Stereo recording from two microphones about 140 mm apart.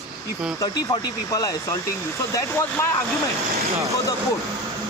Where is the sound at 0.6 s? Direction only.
25° left (ahead or behind).